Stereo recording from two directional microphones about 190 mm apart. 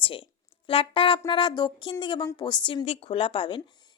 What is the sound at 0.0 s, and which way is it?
A woman's voice, 25° left (ahead or behind).